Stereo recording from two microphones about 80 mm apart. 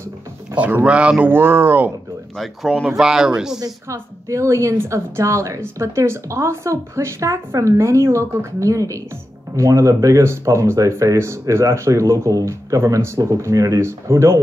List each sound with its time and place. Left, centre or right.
0.6 s speech: centre
1.3 s speech: right
2.3 s speech: centre
3.9 s a woman's voice: right